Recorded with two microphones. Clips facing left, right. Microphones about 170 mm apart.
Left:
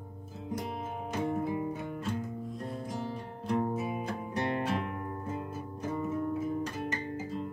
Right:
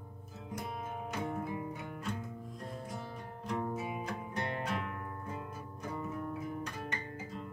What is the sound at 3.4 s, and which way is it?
Music, 30° left (ahead or behind).